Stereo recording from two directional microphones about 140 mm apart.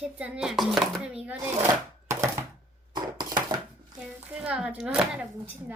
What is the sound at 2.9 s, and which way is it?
Dishes, 30° right (ahead or behind).